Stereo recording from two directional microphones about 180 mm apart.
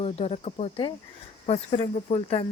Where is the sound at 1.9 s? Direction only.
35° left (ahead or behind).